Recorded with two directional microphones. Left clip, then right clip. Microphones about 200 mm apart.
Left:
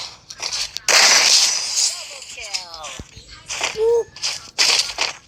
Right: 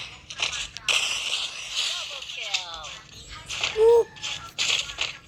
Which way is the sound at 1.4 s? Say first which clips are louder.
Left 9 dB; 45° left (ahead or behind).